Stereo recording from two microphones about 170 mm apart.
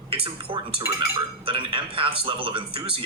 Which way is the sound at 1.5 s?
30° right (ahead or behind).